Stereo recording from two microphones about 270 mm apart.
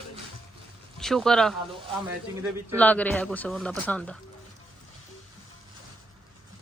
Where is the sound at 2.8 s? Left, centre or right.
Centre.